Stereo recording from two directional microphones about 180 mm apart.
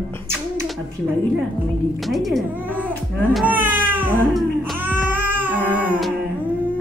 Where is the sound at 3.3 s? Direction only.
10° right (ahead or behind).